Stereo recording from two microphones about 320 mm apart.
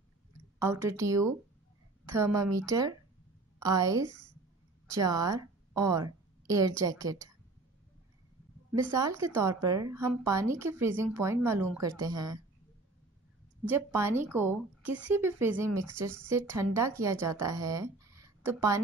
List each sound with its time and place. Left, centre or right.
0.6 s a woman's voice: centre
8.9 s speech: centre
13.7 s speech: centre